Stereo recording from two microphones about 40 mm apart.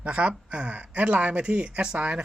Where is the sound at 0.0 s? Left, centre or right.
Right.